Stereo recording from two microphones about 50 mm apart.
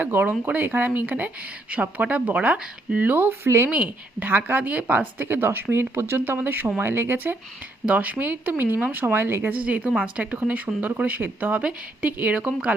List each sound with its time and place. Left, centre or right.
0.0 s speech: right
3.7 s speech: right
4.3 s speech: right
6.7 s speech: right
7.9 s speech: right
9.5 s speech: right
12.4 s speech: right